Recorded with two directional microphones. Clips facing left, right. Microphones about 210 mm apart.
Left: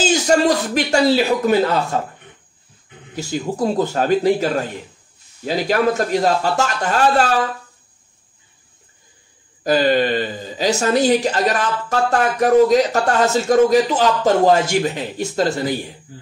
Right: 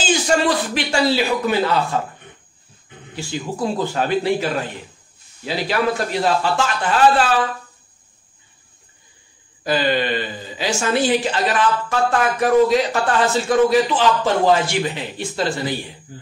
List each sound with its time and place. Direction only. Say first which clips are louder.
0.0 s speech: left 3 dB; 40° left (ahead or behind)
3.2 s speech: left 3 dB; 40° left (ahead or behind)
9.6 s speech: left 4 dB; 45° left (ahead or behind)